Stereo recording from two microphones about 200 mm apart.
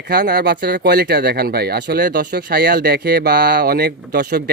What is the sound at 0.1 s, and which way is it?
Speech, 55° right (ahead or behind).